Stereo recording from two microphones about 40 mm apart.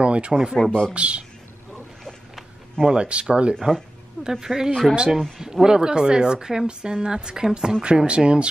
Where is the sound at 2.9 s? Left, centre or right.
Right.